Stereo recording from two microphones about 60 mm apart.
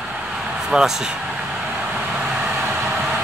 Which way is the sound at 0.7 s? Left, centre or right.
Centre.